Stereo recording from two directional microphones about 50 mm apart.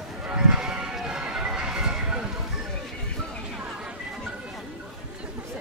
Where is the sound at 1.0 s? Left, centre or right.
Centre.